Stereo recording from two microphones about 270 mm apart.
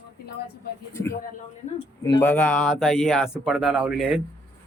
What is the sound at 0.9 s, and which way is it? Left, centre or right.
Speech, centre.